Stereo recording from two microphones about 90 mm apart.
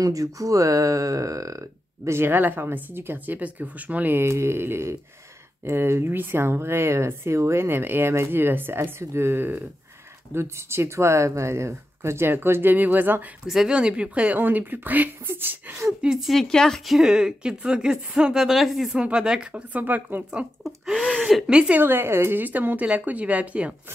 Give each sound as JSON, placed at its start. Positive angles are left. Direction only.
{"t": 0.0, "sound": "speech", "side_deg": -40}
{"t": 13.5, "sound": "speech", "side_deg": -5}
{"t": 16.1, "sound": "speech", "side_deg": 0}
{"t": 20.2, "sound": "speech", "side_deg": -5}
{"t": 21.8, "sound": "speech", "side_deg": -25}